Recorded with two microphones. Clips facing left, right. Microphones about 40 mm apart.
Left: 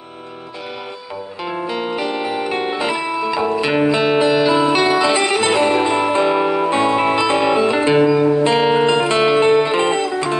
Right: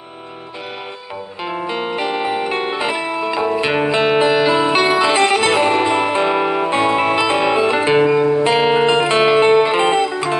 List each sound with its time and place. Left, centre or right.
1.4 s music: centre
8.5 s music: centre